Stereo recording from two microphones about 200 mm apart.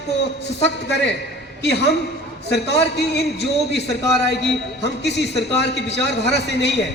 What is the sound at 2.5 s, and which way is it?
A man's voice, 55° left (ahead or behind).